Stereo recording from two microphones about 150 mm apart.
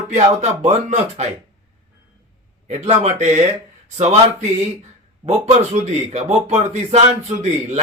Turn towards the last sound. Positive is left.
turn(degrees=-50)  # may be behind; listen again after turning